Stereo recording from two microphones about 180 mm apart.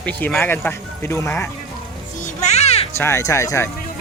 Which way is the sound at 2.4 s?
35° left (ahead or behind).